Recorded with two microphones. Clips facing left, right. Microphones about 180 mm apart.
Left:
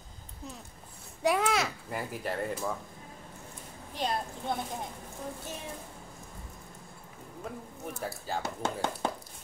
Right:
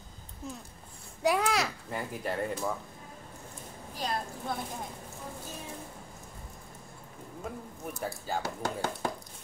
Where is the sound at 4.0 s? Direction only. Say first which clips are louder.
Left 2 dB; 25° left (ahead or behind).